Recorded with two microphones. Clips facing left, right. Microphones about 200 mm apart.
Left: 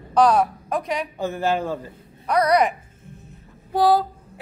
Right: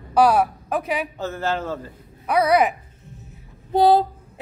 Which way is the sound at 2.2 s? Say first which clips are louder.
Right 1 dB; 5° right (ahead or behind).